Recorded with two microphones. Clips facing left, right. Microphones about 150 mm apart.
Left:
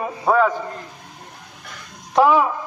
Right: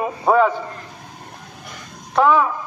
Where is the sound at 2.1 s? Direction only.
15° left (ahead or behind).